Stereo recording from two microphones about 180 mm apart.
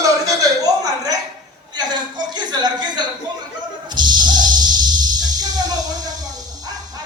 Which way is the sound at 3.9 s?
25° right (ahead or behind).